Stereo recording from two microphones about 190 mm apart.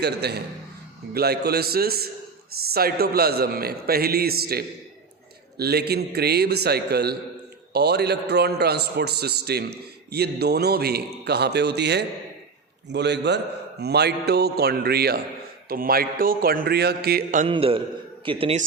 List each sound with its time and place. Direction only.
0.0 s a man's voice: 60° right (ahead or behind)
17.4 s a man's voice: 30° right (ahead or behind)